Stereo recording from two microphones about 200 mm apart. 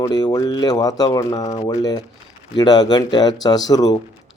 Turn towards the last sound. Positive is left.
turn(degrees=20)  # may be behind; listen again after turning